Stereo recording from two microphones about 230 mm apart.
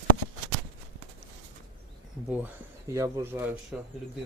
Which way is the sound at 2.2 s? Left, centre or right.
Centre.